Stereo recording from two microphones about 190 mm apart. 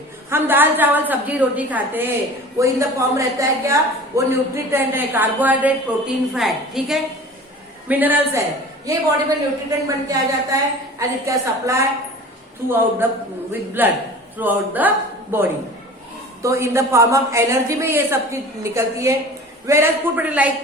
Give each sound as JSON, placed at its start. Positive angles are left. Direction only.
{"t": 0.3, "sound": "a man's voice", "side_deg": -10}